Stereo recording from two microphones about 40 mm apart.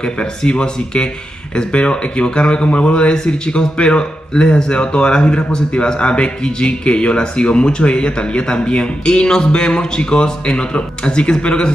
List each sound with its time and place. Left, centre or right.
0.0 s speech: left